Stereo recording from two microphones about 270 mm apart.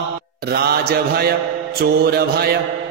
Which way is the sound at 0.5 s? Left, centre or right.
Right.